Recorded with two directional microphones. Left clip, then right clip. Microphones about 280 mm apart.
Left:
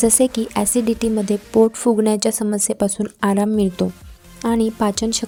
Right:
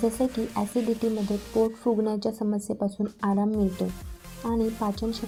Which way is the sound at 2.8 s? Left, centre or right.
Left.